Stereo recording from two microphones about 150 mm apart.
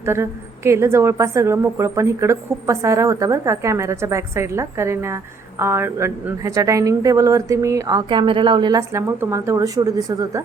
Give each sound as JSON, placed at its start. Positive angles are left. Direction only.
{"t": 0.0, "sound": "a woman's voice", "side_deg": -15}
{"t": 8.9, "sound": "a woman's voice", "side_deg": -20}